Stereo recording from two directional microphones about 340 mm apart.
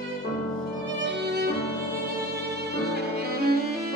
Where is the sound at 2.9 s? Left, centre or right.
Right.